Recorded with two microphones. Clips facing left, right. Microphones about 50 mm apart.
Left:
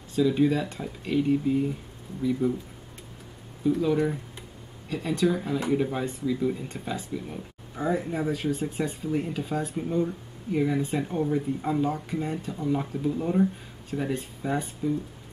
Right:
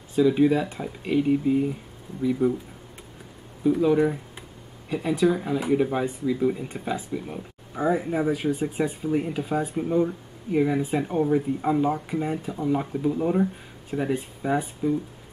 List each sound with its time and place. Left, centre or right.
0.1 s speech: centre
3.6 s speech: centre